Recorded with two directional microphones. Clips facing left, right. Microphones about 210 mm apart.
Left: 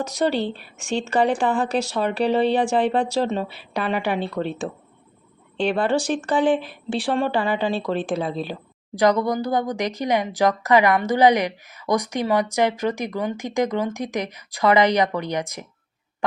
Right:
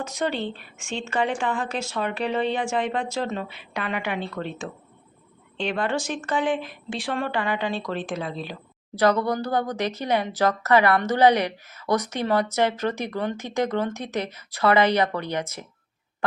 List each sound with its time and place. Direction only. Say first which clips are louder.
0.0 s a woman's voice: left 5 dB; 35° left (ahead or behind)
5.5 s a woman's voice: left 5 dB; 35° left (ahead or behind)
9.0 s speech: left 2 dB; 15° left (ahead or behind)